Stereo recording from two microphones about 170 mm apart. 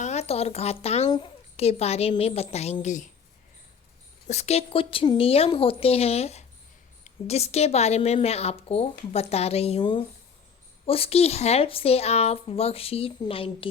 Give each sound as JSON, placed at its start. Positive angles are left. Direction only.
{"t": 0.0, "sound": "speech", "side_deg": 40}
{"t": 1.5, "sound": "speech", "side_deg": 35}
{"t": 4.3, "sound": "speech", "side_deg": 40}